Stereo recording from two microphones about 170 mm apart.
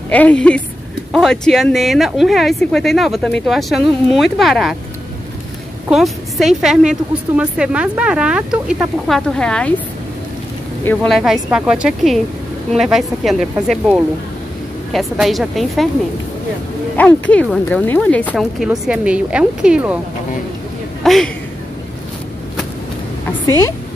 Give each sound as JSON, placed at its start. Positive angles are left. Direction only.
{"t": 0.1, "sound": "a woman's voice", "side_deg": 10}
{"t": 5.9, "sound": "a woman's voice", "side_deg": 0}
{"t": 11.1, "sound": "a woman's voice", "side_deg": 0}
{"t": 16.9, "sound": "speech", "side_deg": 10}
{"t": 18.3, "sound": "a woman's voice", "side_deg": 0}
{"t": 21.0, "sound": "a woman's voice", "side_deg": 0}
{"t": 23.4, "sound": "speech", "side_deg": 15}